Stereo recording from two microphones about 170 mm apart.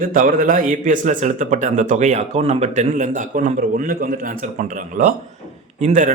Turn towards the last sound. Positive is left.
turn(degrees=-45)  # may be behind; listen again after turning